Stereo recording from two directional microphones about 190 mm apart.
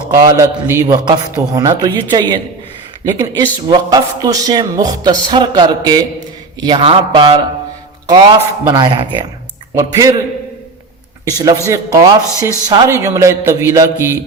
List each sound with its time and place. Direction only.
0.1 s a man's voice: 15° right (ahead or behind)
11.3 s a man's voice: 20° right (ahead or behind)